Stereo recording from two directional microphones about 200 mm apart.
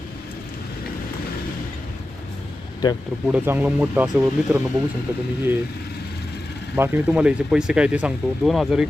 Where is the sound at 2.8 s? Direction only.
20° left (ahead or behind).